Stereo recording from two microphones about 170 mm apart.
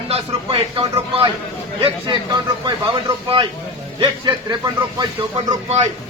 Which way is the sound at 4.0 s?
25° right (ahead or behind).